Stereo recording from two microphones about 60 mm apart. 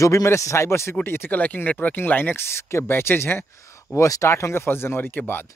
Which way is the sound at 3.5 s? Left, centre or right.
Left.